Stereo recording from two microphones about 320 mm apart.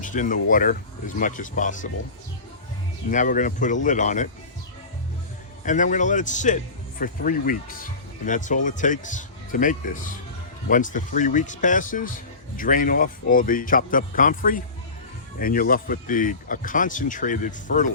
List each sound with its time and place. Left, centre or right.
0.0 s speech: left
3.1 s speech: left
5.6 s speech: left